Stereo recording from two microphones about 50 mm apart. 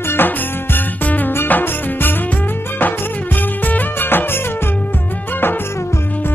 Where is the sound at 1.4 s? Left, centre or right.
Left.